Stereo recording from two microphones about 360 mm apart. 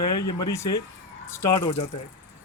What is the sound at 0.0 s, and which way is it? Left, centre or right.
Speech, left.